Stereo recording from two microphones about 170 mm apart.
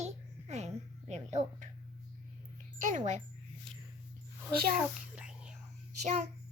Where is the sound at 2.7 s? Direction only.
50° right (ahead or behind).